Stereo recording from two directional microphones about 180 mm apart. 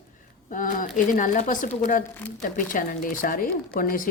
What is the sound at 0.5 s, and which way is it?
Speech, 45° left (ahead or behind).